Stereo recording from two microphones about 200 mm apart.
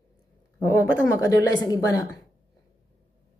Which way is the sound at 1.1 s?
15° left (ahead or behind).